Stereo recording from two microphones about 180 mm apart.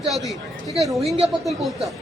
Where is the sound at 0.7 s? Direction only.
Centre (ahead or behind).